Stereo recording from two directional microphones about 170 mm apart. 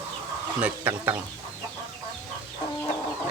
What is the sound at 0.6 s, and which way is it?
Speech, 10° right (ahead or behind).